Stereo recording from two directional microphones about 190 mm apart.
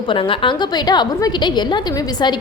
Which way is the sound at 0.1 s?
25° left (ahead or behind).